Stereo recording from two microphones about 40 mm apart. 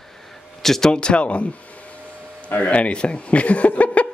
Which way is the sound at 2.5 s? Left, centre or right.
Left.